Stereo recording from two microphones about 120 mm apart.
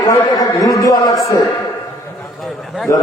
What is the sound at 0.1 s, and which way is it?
A man's voice, 30° left (ahead or behind).